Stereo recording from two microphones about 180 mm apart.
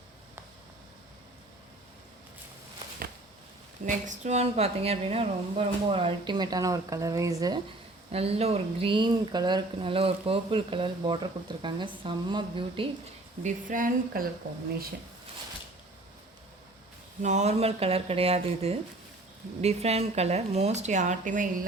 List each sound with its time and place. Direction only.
3.8 s a woman's voice: 45° right (ahead or behind); by 7.6 s 20° right (ahead or behind)
8.1 s speech: 35° right (ahead or behind)
13.4 s speech: 45° right (ahead or behind)
17.2 s a woman's voice: 40° right (ahead or behind)